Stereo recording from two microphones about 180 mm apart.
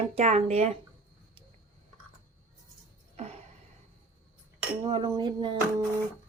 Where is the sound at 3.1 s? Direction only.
35° right (ahead or behind).